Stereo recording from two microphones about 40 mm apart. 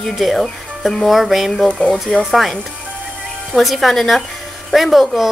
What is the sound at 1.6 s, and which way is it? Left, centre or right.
Speech, left.